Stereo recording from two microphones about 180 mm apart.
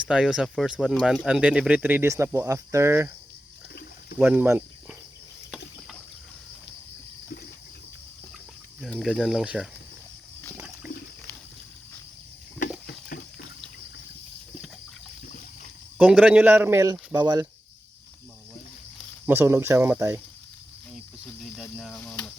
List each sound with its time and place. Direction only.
0.0 s speech: 5° right (ahead or behind)
4.2 s speech: 10° right (ahead or behind)
8.8 s speech: centre (ahead or behind)
16.0 s speech: 10° right (ahead or behind)
19.2 s speech: 10° right (ahead or behind)
21.5 s cricket: centre (ahead or behind)